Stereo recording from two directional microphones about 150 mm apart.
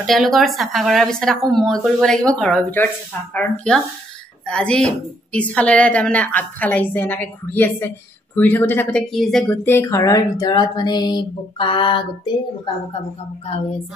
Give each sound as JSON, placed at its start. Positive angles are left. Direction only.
{"t": 0.0, "sound": "a woman's voice", "side_deg": 0}